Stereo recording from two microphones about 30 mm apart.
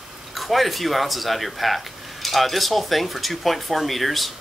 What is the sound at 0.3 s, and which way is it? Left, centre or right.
Speech, centre.